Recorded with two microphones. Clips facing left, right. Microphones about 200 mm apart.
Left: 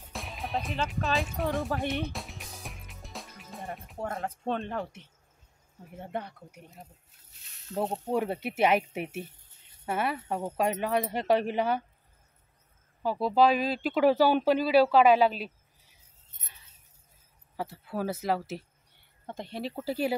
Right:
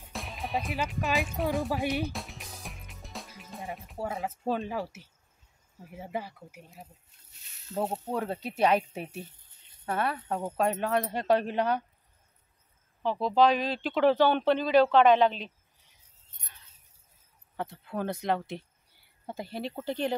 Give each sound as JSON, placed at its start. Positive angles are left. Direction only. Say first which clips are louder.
{"t": 0.1, "sound": "music", "louder": "right 1 dB", "side_deg": 0}
{"t": 4.5, "sound": "speech", "louder": "right 1 dB", "side_deg": -5}
{"t": 8.1, "sound": "speech", "louder": "left 3 dB", "side_deg": 15}
{"t": 13.0, "sound": "speech", "louder": "even", "side_deg": 10}
{"t": 17.6, "sound": "speech", "louder": "left 1 dB", "side_deg": 5}